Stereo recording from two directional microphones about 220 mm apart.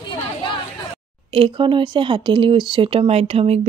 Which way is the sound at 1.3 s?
25° right (ahead or behind).